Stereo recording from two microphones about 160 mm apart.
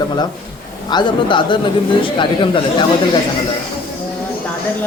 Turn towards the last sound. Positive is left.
turn(degrees=30)  # may be behind; listen again after turning